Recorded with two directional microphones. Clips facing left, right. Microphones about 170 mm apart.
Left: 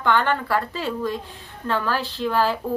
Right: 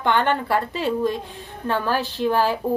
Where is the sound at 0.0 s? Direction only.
20° right (ahead or behind).